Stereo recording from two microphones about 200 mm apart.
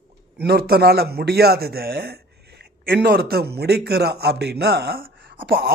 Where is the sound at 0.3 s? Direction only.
50° right (ahead or behind).